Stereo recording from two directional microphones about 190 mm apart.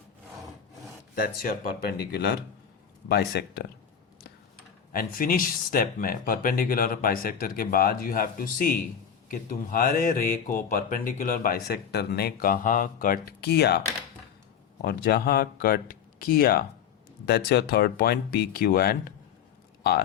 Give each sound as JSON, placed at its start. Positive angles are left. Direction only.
{"t": 1.2, "sound": "speech", "side_deg": 50}
{"t": 4.9, "sound": "speech", "side_deg": 50}